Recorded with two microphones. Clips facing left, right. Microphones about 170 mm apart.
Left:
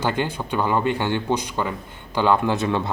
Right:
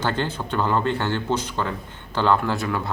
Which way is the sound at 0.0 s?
10° left (ahead or behind).